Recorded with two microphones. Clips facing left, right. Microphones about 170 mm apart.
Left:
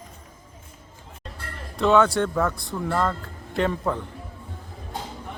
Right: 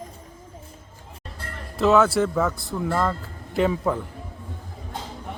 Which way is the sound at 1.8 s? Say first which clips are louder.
Right 1 dB; centre (ahead or behind).